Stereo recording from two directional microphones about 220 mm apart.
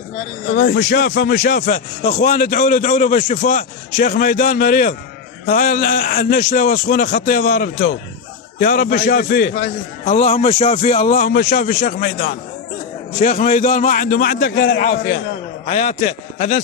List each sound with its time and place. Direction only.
0.4 s speech: 50° left (ahead or behind); by 16.6 s 35° left (ahead or behind)